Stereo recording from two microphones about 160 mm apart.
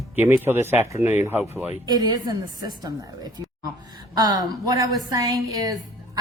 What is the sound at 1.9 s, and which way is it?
A woman's voice, 25° right (ahead or behind).